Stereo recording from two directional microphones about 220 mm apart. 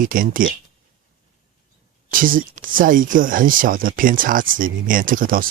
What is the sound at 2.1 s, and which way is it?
Speech, 40° right (ahead or behind).